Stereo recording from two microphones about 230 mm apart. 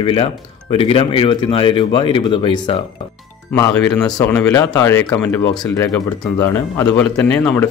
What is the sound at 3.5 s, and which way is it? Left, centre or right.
Speech, centre.